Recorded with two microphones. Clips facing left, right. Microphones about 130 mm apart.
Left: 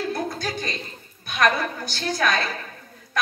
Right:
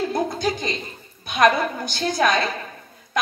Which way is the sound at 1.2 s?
20° right (ahead or behind).